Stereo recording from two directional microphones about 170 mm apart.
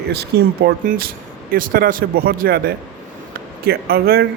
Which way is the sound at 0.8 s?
60° right (ahead or behind).